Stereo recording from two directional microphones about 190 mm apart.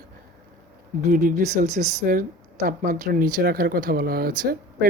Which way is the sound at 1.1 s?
45° right (ahead or behind).